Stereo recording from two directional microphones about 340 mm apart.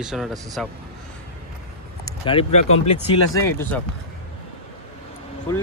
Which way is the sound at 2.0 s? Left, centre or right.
Centre.